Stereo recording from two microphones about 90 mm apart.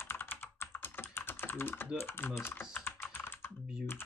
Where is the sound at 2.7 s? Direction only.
25° left (ahead or behind).